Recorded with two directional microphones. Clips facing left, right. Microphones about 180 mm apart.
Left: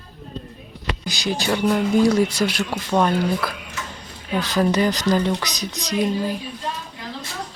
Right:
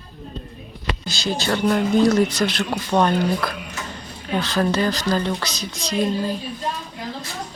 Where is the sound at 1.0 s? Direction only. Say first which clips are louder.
Left 1 dB; 15° left (ahead or behind).